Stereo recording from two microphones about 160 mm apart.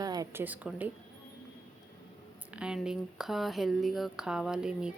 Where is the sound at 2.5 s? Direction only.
5° right (ahead or behind).